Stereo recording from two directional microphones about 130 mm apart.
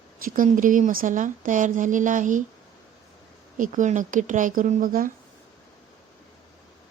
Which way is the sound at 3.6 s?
80° right.